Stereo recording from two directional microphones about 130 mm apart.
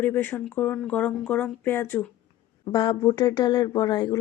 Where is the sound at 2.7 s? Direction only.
35° left (ahead or behind).